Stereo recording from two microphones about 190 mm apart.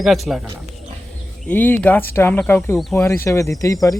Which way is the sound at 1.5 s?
10° left (ahead or behind).